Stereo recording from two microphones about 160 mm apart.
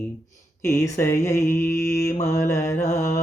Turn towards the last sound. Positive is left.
turn(degrees=20)  # may be behind; listen again after turning